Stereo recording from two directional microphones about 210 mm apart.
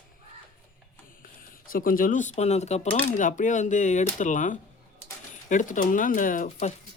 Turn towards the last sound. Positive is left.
turn(degrees=40)  # may be behind; listen again after turning